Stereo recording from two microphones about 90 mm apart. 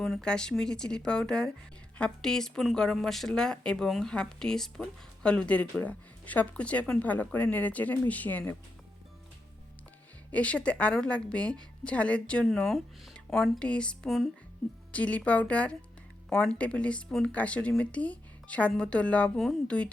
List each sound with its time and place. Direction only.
0.0 s a woman's voice: 5° left (ahead or behind)
10.3 s a woman's voice: 15° left (ahead or behind)